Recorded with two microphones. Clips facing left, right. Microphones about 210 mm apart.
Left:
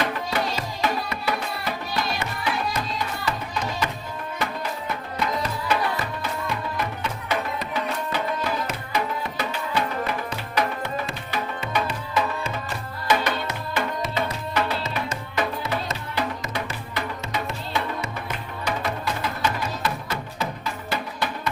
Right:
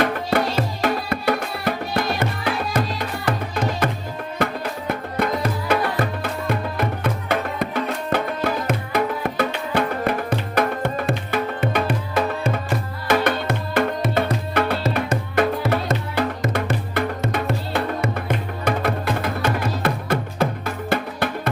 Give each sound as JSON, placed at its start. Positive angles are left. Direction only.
{"t": 0.0, "sound": "music", "side_deg": -55}
{"t": 4.9, "sound": "music", "side_deg": -55}